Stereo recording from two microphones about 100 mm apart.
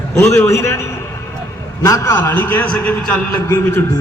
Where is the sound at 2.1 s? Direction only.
20° left (ahead or behind).